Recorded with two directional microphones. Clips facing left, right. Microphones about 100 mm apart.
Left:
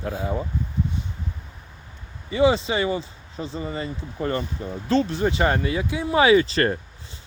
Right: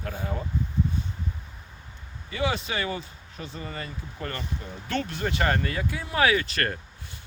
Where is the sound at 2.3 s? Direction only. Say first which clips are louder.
Left 9 dB; 25° left (ahead or behind).